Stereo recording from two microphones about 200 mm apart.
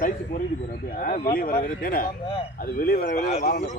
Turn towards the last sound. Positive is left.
turn(degrees=50)  # may be behind; listen again after turning